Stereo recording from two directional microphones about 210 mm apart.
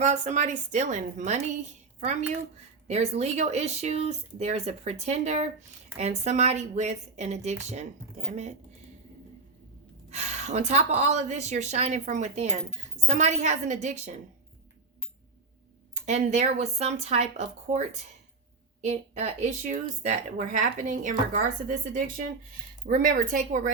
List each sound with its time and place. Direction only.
0.0 s a woman's voice: 35° right (ahead or behind)
2.8 s a woman's voice: 30° right (ahead or behind)
10.1 s a woman's voice: 30° right (ahead or behind)
16.0 s a woman's voice: 35° right (ahead or behind)